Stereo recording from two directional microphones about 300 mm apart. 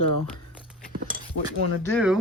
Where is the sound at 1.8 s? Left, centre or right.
Centre.